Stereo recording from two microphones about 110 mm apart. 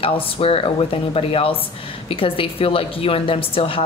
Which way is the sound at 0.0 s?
60° left (ahead or behind).